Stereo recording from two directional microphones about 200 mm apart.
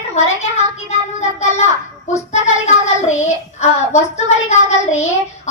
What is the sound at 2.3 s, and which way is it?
A child's voice, 35° left (ahead or behind).